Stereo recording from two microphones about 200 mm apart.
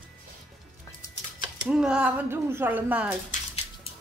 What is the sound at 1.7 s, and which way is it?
Speech, 5° right (ahead or behind).